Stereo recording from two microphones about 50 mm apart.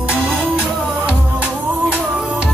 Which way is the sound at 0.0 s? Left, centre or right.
Right.